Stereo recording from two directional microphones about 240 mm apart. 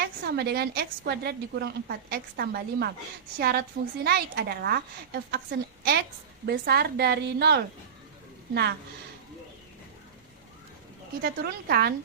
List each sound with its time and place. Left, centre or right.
0.0 s a woman's voice: right
11.2 s a woman's voice: right